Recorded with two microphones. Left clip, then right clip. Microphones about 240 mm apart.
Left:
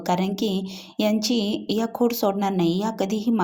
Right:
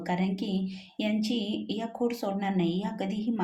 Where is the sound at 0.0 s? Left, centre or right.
Left.